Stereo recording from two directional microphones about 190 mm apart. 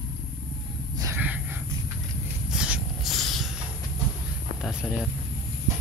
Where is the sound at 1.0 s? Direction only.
10° right (ahead or behind).